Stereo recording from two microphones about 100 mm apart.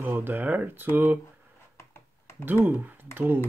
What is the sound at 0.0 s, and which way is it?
Speech, 20° right (ahead or behind).